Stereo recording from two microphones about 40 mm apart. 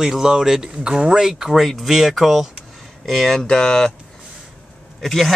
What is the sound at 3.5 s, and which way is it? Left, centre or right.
Speech, left.